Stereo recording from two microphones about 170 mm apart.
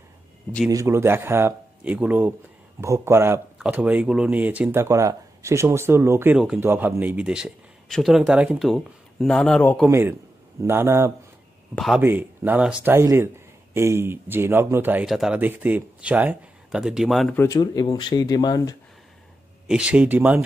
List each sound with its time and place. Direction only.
0.7 s speech: 20° right (ahead or behind); by 9.8 s 10° left (ahead or behind)
9.8 s speech: 15° right (ahead or behind)
11.7 s a man's voice: centre (ahead or behind)
12.0 s speech: 10° right (ahead or behind)
17.4 s speech: 20° left (ahead or behind)
19.7 s speech: 5° right (ahead or behind)